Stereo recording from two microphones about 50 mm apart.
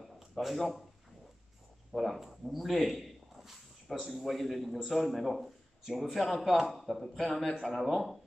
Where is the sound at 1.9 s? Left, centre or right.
Centre.